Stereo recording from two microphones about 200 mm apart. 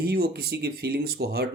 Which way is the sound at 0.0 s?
50° right (ahead or behind).